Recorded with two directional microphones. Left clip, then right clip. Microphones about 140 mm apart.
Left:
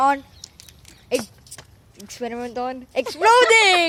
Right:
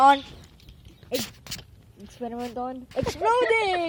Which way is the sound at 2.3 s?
50° left (ahead or behind).